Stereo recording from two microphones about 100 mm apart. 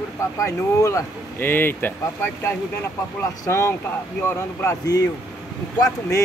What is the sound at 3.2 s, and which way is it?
Speech, 25° left (ahead or behind).